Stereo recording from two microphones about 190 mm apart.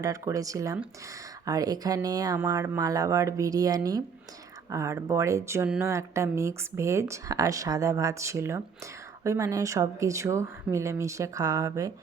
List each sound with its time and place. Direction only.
0.0 s speech: 20° right (ahead or behind)